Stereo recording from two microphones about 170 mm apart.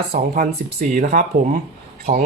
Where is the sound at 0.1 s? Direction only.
60° right (ahead or behind).